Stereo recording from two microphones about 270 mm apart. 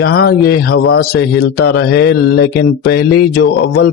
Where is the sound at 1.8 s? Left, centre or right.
Left.